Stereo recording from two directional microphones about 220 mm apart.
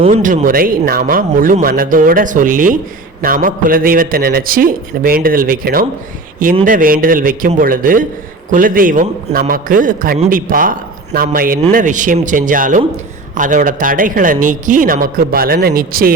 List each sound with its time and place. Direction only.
0.0 s a man's voice: 35° right (ahead or behind)